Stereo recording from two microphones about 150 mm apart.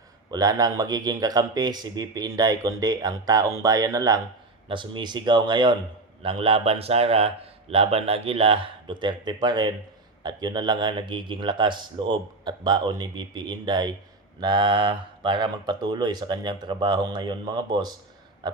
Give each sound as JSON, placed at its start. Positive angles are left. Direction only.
{"t": 0.3, "sound": "speech", "side_deg": -25}